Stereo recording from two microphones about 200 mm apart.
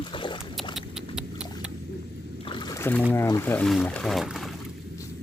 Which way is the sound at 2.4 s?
25° left (ahead or behind).